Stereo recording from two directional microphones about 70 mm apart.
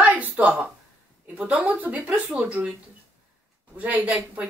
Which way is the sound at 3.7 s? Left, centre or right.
Right.